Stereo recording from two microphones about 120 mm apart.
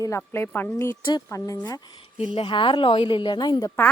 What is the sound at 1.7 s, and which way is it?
A woman's voice, 40° left (ahead or behind).